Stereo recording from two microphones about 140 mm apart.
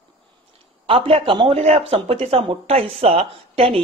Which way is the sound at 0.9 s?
40° right (ahead or behind).